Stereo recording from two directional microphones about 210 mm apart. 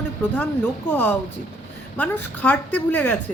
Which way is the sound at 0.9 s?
10° left (ahead or behind).